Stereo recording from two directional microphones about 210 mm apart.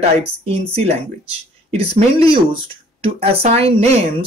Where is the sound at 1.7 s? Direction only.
25° right (ahead or behind).